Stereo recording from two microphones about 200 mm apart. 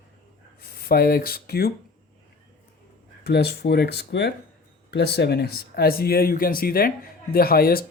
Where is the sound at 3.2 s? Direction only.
55° left (ahead or behind).